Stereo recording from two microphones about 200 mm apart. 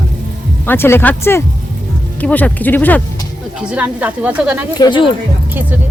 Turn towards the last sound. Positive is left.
turn(degrees=25)  # may be behind; listen again after turning